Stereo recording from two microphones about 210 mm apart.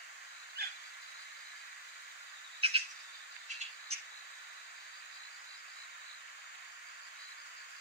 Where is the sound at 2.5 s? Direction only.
30° right (ahead or behind).